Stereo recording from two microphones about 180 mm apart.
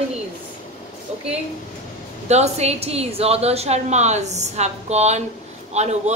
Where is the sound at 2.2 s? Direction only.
35° right (ahead or behind).